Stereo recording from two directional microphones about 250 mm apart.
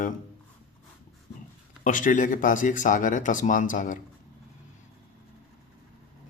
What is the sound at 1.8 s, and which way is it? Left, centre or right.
Speech, left.